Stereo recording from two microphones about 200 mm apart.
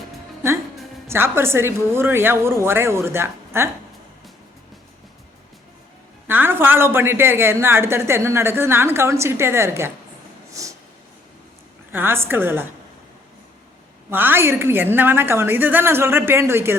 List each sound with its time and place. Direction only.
1.0 s a man's voice: 10° right (ahead or behind)
6.2 s a man's voice: 10° right (ahead or behind)
11.9 s a man's voice: 10° right (ahead or behind)
14.1 s a man's voice: 10° right (ahead or behind)